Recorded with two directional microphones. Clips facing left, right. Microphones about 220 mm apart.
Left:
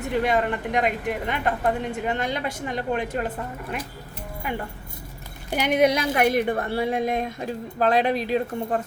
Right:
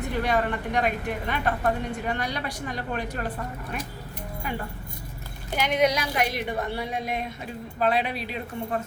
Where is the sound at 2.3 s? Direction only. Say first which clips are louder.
Left 4 dB; 25° left (ahead or behind).